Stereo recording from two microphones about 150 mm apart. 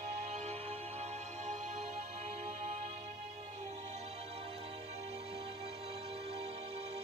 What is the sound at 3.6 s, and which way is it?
Music, 50° right (ahead or behind).